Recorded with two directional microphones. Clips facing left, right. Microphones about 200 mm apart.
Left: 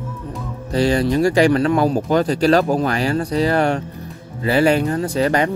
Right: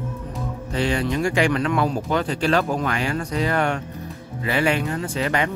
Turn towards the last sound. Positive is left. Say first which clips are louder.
# left 6 dB
turn(degrees=40)  # may be behind; listen again after turning